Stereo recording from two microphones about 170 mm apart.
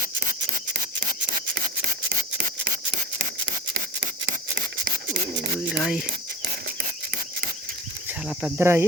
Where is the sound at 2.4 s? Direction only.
50° right (ahead or behind).